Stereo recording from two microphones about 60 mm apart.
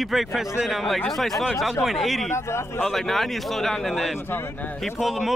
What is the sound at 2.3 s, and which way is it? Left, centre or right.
Speech, left.